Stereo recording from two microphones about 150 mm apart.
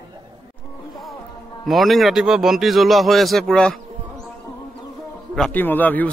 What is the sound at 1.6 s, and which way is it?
A man's voice, centre (ahead or behind).